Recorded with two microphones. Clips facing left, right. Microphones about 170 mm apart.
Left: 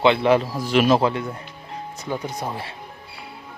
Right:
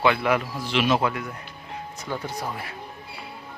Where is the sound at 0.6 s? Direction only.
45° left (ahead or behind); by 1.4 s 30° left (ahead or behind).